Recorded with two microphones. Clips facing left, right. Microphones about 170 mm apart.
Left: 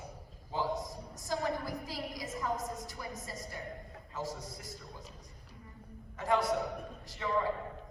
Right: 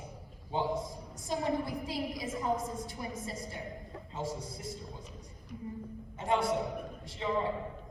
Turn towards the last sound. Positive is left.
turn(degrees=-25)  # may be behind; listen again after turning